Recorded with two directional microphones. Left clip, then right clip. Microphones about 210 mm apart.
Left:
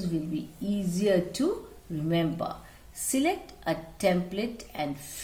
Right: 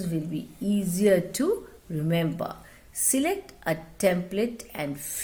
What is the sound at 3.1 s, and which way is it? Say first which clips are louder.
A woman's voice: even; 45° right (ahead or behind).